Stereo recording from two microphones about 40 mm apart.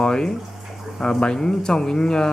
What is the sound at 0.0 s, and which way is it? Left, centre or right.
Bathtub, centre.